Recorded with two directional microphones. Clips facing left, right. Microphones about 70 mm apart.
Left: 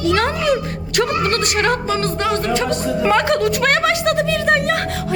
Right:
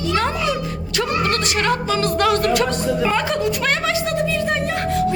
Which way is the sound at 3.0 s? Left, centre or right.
Left.